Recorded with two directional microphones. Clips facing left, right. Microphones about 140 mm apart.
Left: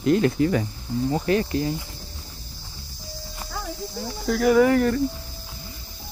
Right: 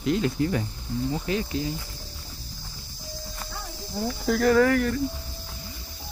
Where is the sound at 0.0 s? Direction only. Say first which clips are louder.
Left 5 dB; 50° left (ahead or behind).